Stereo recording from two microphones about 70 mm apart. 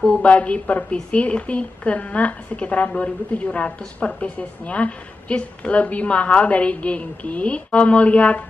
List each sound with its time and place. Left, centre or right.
0.2 s a woman's voice: centre